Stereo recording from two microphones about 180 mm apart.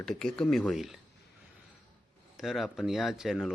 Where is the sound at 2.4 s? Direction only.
Centre (ahead or behind).